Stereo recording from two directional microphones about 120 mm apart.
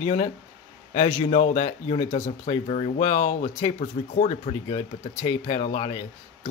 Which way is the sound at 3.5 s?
60° left (ahead or behind).